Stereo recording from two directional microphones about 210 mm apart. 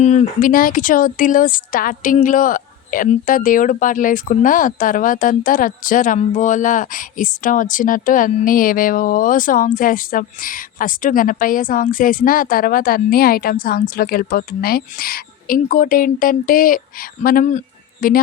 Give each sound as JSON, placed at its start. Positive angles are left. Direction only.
{"t": 0.0, "sound": "speech", "side_deg": 35}